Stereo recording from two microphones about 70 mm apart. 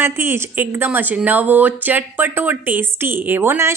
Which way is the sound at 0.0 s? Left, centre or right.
Right.